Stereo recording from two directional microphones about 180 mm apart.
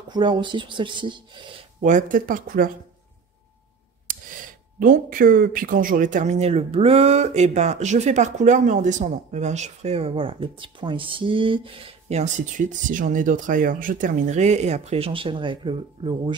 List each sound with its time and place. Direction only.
0.1 s speech: 25° right (ahead or behind)
1.8 s speech: 45° right (ahead or behind)
4.7 s speech: 50° right (ahead or behind); by 16.3 s 25° right (ahead or behind)